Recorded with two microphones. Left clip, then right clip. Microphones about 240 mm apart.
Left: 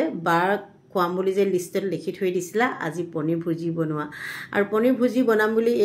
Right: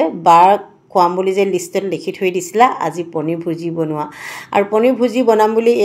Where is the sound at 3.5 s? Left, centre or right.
Right.